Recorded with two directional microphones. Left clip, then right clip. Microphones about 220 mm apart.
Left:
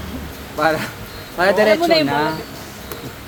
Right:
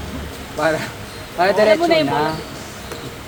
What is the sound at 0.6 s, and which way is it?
Speech, 40° left (ahead or behind).